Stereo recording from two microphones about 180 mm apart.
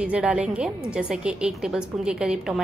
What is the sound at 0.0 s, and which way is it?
A woman's voice, 5° right (ahead or behind).